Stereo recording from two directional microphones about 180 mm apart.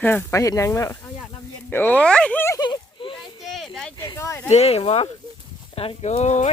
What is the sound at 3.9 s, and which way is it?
Speech, 20° left (ahead or behind).